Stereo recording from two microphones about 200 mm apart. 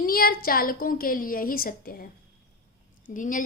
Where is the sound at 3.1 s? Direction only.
40° left (ahead or behind).